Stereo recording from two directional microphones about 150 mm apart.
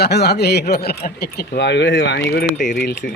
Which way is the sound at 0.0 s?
90° left.